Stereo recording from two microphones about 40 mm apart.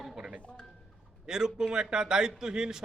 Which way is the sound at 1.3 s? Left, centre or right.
Centre.